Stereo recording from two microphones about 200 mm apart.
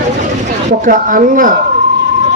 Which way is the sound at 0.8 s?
40° right (ahead or behind).